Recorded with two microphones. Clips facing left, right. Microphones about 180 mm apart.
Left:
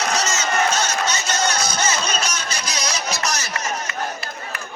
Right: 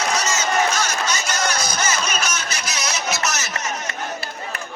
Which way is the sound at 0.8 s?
30° left (ahead or behind).